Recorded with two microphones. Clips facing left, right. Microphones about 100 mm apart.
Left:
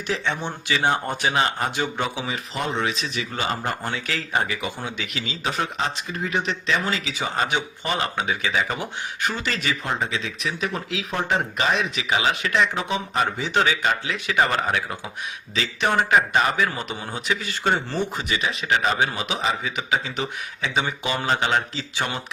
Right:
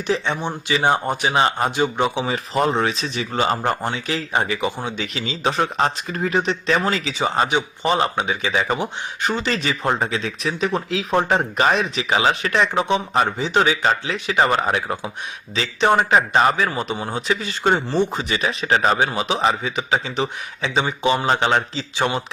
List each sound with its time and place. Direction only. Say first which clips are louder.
0.1 s a man's voice: right 4 dB; 15° right (ahead or behind)
1.3 s speech: right 4 dB; 30° right (ahead or behind)
2.2 s speech: right 7 dB; 35° right (ahead or behind)
3.8 s speech: right 4 dB; 20° right (ahead or behind)
13.7 s speech: right 3 dB; 35° right (ahead or behind)